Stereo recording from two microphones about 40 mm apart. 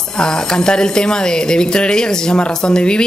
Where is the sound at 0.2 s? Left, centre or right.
Centre.